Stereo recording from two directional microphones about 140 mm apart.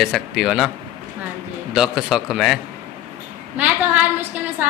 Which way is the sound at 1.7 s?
Centre (ahead or behind).